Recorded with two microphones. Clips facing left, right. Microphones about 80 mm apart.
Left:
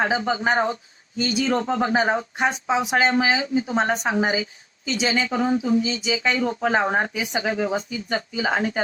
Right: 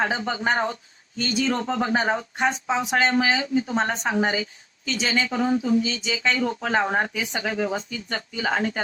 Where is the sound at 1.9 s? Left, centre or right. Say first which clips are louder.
Left 2 dB; centre.